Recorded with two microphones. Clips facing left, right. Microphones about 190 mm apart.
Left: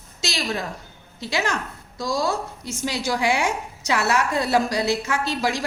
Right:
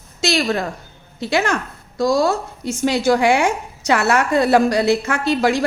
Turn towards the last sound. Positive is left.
turn(degrees=-60)  # may be behind; listen again after turning